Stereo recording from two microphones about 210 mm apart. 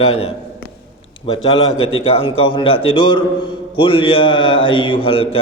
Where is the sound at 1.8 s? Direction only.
25° left (ahead or behind).